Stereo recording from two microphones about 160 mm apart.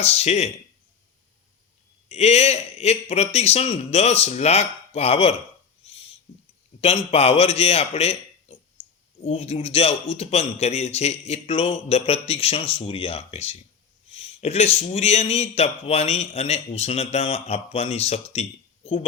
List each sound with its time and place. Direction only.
0.0 s a man's voice: 40° left (ahead or behind)
2.0 s a man's voice: 40° left (ahead or behind)
6.8 s a man's voice: 40° left (ahead or behind)
8.8 s clicking: 40° left (ahead or behind)
9.2 s a man's voice: 45° left (ahead or behind)